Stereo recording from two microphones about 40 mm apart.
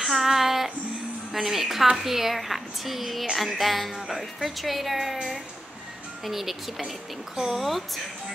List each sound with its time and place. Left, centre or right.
0.0 s child singing: centre
1.3 s a woman's voice: centre
6.2 s a woman's voice: centre